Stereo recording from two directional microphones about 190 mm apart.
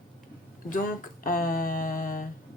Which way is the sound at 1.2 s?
45° left (ahead or behind).